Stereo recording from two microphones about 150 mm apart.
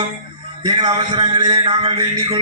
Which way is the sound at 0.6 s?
30° right (ahead or behind).